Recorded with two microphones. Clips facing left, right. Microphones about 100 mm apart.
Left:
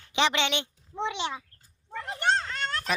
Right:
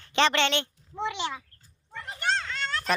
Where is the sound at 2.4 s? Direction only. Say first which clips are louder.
Even; 45° left (ahead or behind).